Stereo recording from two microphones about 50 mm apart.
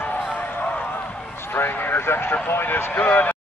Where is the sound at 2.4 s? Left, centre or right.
Left.